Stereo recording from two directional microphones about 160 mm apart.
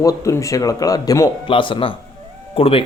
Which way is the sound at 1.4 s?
35° left (ahead or behind).